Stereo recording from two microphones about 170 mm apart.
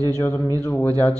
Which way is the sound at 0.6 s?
10° left (ahead or behind).